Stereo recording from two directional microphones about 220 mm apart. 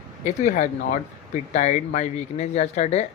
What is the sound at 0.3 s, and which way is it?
Speech, 35° left (ahead or behind).